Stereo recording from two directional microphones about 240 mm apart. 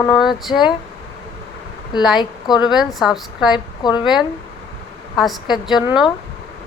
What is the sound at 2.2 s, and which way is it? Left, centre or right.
Speech, centre.